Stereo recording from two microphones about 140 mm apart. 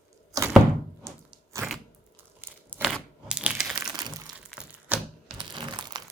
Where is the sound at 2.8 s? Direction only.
5° right (ahead or behind).